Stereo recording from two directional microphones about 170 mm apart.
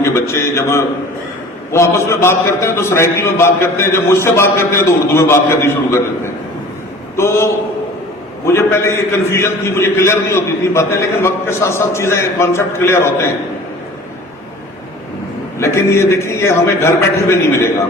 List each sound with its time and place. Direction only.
0.0 s a man's voice: 15° left (ahead or behind)
15.5 s a man's voice: 15° left (ahead or behind)